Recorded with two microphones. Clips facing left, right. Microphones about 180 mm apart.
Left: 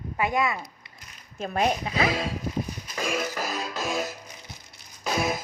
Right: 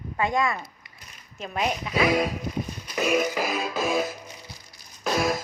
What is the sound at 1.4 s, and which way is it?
Speech, 45° left (ahead or behind).